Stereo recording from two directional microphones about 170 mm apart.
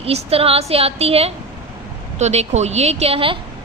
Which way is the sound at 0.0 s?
35° right (ahead or behind).